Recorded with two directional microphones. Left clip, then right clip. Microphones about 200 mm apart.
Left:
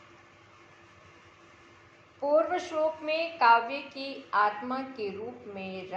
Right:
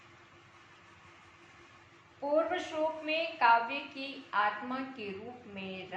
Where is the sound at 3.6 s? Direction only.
25° left (ahead or behind).